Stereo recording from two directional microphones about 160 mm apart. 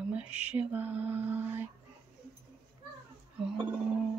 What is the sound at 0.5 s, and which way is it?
Mantra, 10° right (ahead or behind).